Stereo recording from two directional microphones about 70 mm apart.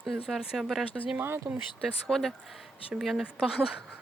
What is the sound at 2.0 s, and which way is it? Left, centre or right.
Speech, centre.